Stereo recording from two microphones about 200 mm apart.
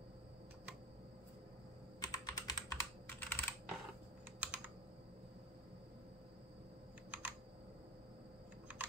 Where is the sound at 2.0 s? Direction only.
20° left (ahead or behind).